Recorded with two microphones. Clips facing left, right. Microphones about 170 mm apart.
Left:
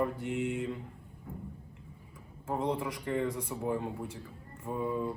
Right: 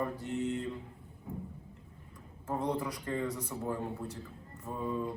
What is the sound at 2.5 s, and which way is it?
Speech, 15° left (ahead or behind).